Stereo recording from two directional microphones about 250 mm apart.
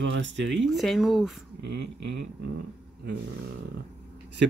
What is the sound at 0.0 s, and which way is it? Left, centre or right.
Speech, right.